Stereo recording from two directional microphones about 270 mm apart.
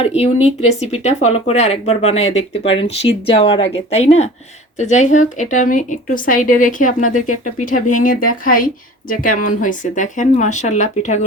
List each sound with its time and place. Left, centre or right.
0.0 s a woman's voice: left